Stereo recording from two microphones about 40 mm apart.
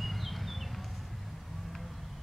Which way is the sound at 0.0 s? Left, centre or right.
Centre.